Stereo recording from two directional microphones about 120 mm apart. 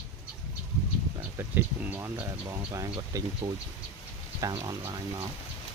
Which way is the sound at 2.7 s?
25° right (ahead or behind).